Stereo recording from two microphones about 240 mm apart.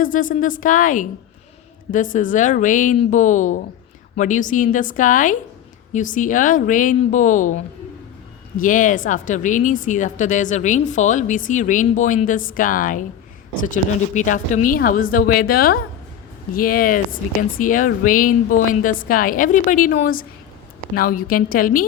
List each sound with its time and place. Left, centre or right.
0.0 s a woman's voice: left